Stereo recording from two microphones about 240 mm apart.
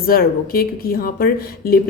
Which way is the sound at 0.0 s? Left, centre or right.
Left.